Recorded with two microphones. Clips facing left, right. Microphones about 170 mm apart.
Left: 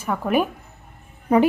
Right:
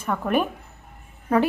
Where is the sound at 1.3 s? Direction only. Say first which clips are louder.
Left 3 dB; 20° left (ahead or behind).